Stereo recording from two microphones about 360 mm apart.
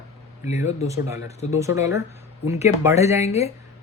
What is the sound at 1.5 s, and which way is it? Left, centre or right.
Speech, centre.